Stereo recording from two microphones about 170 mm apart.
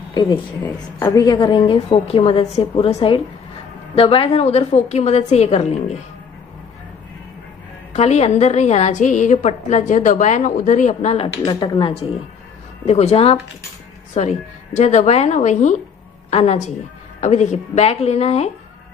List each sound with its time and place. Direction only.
0.1 s a woman's voice: 25° left (ahead or behind)
7.9 s a woman's voice: 40° left (ahead or behind)
11.4 s a woman's voice: 30° left (ahead or behind)